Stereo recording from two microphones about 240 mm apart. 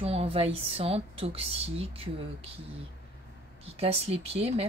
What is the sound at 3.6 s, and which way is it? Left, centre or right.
Speech, right.